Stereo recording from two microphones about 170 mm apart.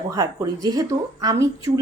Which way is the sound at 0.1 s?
20° right (ahead or behind).